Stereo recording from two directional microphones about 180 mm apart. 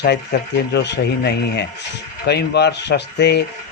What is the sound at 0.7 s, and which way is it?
Speech, 70° left (ahead or behind).